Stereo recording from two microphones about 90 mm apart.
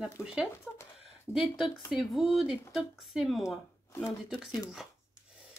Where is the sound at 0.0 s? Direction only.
10° right (ahead or behind).